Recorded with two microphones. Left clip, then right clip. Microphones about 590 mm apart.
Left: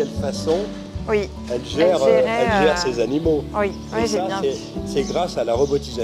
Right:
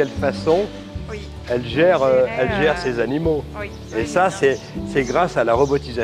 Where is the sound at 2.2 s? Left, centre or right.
Left.